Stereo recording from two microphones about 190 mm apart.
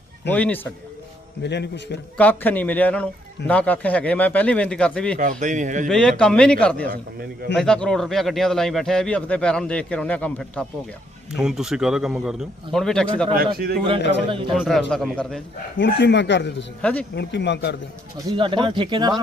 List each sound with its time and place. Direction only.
0.3 s speech: 10° left (ahead or behind)
1.4 s a man's voice: 65° left (ahead or behind)
2.1 s speech: 10° left (ahead or behind)
5.2 s a man's voice: 40° right (ahead or behind)
5.9 s a man's voice: 5° left (ahead or behind)
14.3 s speech: 30° right (ahead or behind)
14.5 s a man's voice: centre (ahead or behind)
15.8 s speech: 65° left (ahead or behind)
16.8 s speech: 5° left (ahead or behind)
17.2 s a man's voice: 65° left (ahead or behind)
18.3 s speech: 25° right (ahead or behind)